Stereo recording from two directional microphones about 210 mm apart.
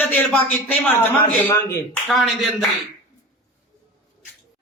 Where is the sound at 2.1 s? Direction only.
Centre (ahead or behind).